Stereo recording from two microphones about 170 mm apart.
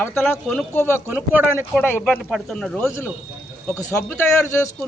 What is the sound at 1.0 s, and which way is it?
Speech, 10° right (ahead or behind).